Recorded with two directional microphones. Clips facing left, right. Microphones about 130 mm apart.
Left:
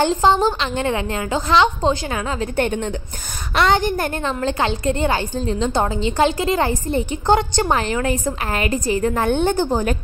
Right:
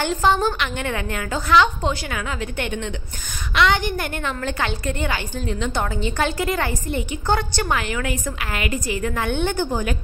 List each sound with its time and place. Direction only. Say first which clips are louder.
0.0 s a woman's voice: left 4 dB; 25° left (ahead or behind)